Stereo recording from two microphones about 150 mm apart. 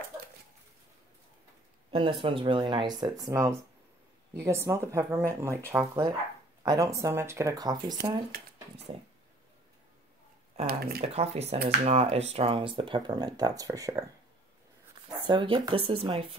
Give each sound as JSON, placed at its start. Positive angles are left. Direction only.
{"t": 1.9, "sound": "speech", "side_deg": -35}
{"t": 10.7, "sound": "speech", "side_deg": -90}
{"t": 11.0, "sound": "speech", "side_deg": -45}
{"t": 15.2, "sound": "speech", "side_deg": -35}